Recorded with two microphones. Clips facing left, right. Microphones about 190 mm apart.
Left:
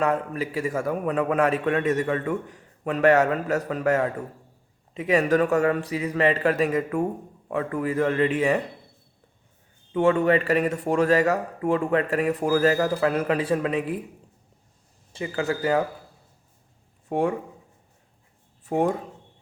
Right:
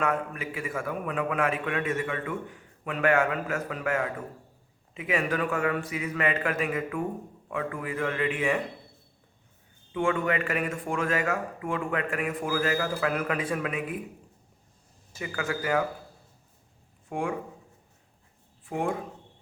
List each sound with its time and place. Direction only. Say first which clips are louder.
0.0 s a man's voice: left 5 dB; 35° left (ahead or behind)
9.9 s a man's voice: left 7 dB; 40° left (ahead or behind)
15.1 s a man's voice: left 5 dB; 30° left (ahead or behind)
17.1 s speech: left 7 dB; 40° left (ahead or behind)
18.6 s speech: left 6 dB; 40° left (ahead or behind)